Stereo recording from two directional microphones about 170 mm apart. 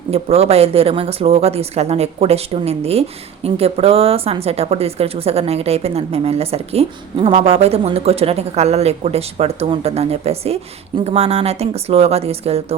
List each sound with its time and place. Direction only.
0.1 s speech: 35° right (ahead or behind)